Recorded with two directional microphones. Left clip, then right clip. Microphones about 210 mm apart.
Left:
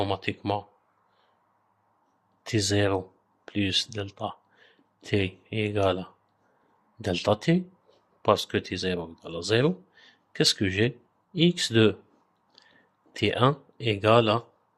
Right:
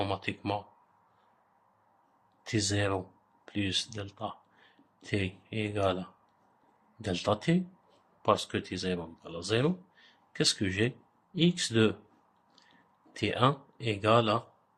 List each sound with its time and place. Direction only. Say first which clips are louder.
0.0 s speech: left 5 dB; 30° left (ahead or behind)
2.4 s speech: left 6 dB; 35° left (ahead or behind)
13.1 s speech: left 4 dB; 35° left (ahead or behind)